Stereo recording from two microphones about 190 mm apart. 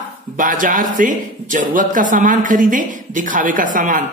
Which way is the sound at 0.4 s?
45° right (ahead or behind).